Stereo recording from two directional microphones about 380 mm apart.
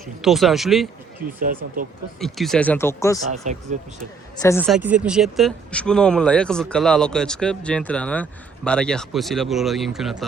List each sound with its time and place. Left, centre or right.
0.0 s speech: centre
1.6 s speech: right
2.2 s speech: centre
3.4 s speech: centre
4.4 s speech: centre